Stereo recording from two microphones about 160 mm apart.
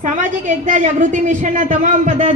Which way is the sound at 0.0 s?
50° right (ahead or behind).